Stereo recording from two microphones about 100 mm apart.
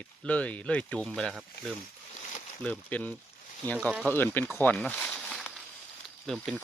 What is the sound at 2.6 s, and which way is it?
Speech, 15° left (ahead or behind).